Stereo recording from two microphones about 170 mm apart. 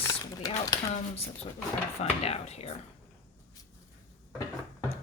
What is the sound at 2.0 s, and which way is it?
Speech, 35° left (ahead or behind).